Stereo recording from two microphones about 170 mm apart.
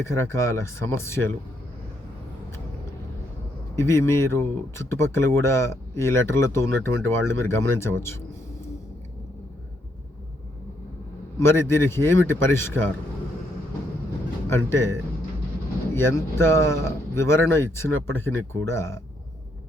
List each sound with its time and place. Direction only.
0.0 s speech: 15° left (ahead or behind)
3.8 s speech: 15° left (ahead or behind)
11.4 s speech: 15° left (ahead or behind)
14.5 s speech: 15° left (ahead or behind)
16.0 s speech: 15° left (ahead or behind)